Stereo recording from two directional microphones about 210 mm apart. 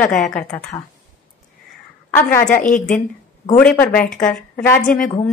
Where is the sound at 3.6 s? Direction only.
5° left (ahead or behind).